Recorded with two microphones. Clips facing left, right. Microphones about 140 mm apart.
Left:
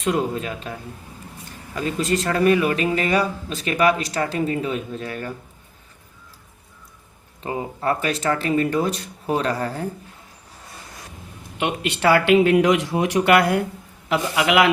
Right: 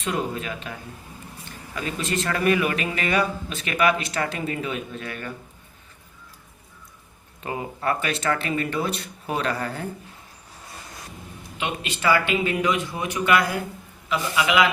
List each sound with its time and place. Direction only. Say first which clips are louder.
0.0 s a man's voice: left 5 dB; 35° left (ahead or behind)
7.4 s a man's voice: left 3 dB; 25° left (ahead or behind)
11.5 s speech: left 5 dB; 60° left (ahead or behind)